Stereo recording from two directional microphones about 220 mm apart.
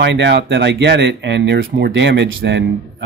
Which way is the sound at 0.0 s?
55° right (ahead or behind).